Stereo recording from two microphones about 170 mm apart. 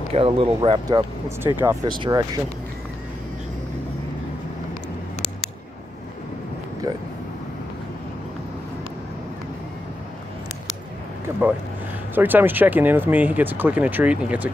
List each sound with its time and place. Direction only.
0.1 s speech: 35° right (ahead or behind)
1.4 s speech: 15° right (ahead or behind)
1.9 s speech: 25° right (ahead or behind)
11.3 s a sound: 15° right (ahead or behind)
12.2 s speech: 10° right (ahead or behind)